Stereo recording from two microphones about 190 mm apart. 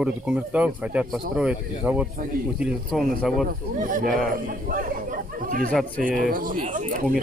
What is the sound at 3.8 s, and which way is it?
Speech, 45° right (ahead or behind).